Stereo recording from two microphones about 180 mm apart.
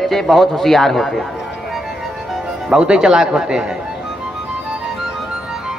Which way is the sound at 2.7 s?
5° right (ahead or behind).